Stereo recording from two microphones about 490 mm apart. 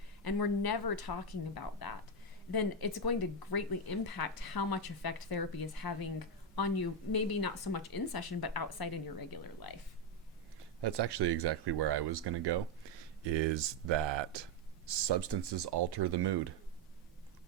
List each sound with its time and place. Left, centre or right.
0.3 s speech: left
10.8 s speech: right